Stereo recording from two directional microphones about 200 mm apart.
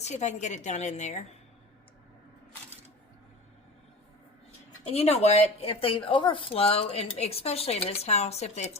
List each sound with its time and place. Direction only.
0.0 s speech: 35° left (ahead or behind)
4.8 s speech: 30° left (ahead or behind)